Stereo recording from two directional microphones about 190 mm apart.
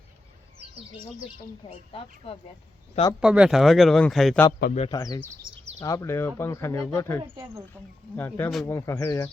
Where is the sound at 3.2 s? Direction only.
5° right (ahead or behind).